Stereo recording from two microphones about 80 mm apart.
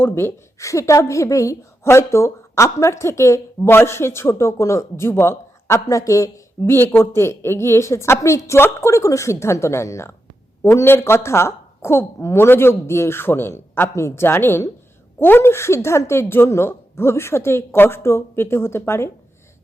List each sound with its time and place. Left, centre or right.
0.0 s a woman's voice: left
6.7 s a woman's voice: left